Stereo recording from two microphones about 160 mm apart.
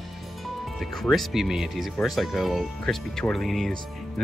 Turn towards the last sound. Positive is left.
turn(degrees=0)  # may be behind; listen again after turning